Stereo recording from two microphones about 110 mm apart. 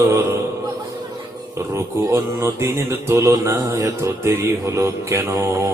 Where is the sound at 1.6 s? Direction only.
25° right (ahead or behind).